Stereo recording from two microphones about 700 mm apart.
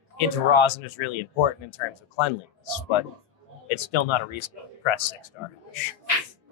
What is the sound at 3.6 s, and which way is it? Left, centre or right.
Speech, left.